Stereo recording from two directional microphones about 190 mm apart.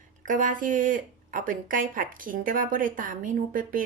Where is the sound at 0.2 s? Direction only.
45° right (ahead or behind).